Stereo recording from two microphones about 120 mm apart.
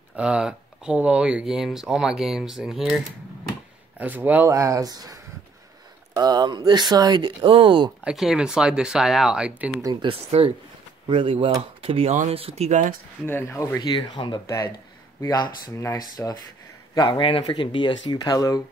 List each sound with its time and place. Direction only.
0.1 s speech: 10° right (ahead or behind)
4.0 s speech: 15° right (ahead or behind); by 7.9 s 45° right (ahead or behind)
8.0 s speech: 5° right (ahead or behind)
10.0 s speech: 50° right (ahead or behind)
12.1 s speech: 90° right
12.4 s speech: 60° right (ahead or behind)
13.2 s speech: 20° left (ahead or behind)
13.8 s speech: 40° left (ahead or behind)
14.4 s a man's voice: 25° left (ahead or behind)